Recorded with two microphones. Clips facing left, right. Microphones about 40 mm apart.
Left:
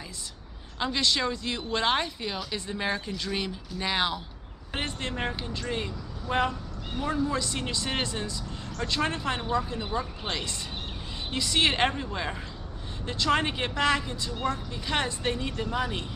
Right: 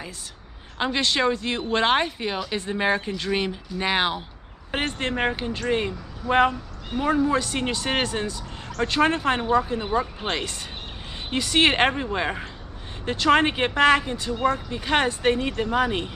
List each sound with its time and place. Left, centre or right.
0.7 s speech: right